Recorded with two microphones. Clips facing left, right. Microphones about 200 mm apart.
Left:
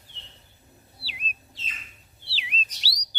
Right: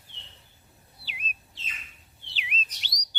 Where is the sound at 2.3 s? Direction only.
35° left (ahead or behind).